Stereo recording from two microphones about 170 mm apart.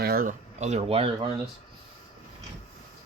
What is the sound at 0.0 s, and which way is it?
Speech, 60° right (ahead or behind).